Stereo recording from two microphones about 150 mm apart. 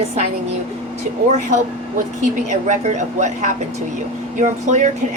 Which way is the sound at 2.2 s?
55° right (ahead or behind).